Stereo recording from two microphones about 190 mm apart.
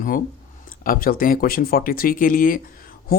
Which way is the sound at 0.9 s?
50° left (ahead or behind).